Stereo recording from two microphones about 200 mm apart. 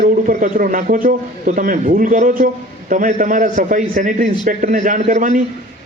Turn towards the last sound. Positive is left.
turn(degrees=-40)  # may be behind; listen again after turning